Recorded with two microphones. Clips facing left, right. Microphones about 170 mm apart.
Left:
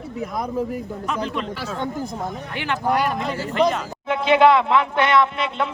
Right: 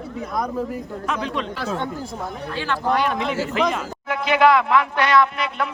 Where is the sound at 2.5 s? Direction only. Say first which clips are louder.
Even; 20° left (ahead or behind).